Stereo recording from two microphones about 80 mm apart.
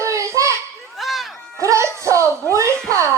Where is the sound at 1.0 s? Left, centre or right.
Centre.